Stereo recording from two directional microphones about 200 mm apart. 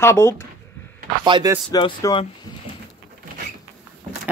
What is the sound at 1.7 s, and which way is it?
Speech, 20° left (ahead or behind).